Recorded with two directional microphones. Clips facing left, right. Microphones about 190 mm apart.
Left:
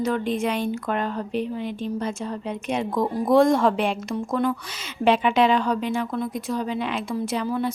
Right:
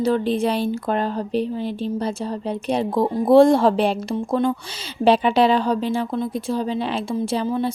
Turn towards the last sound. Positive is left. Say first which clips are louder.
# right 3 dB
turn(degrees=-25)  # may be behind; listen again after turning